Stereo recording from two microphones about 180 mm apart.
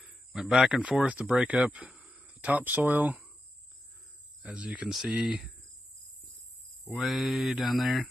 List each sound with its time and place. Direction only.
0.0 s speech: centre (ahead or behind)
4.4 s mantra: centre (ahead or behind)
6.9 s mantra: centre (ahead or behind)